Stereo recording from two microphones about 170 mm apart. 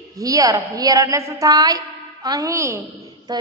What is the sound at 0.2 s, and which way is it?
A woman's voice, 20° right (ahead or behind).